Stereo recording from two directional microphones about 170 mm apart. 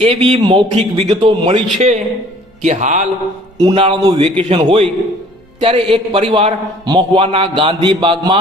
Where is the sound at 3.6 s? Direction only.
30° right (ahead or behind).